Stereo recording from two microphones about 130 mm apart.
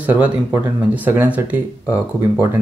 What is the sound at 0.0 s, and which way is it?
Speech, 15° right (ahead or behind).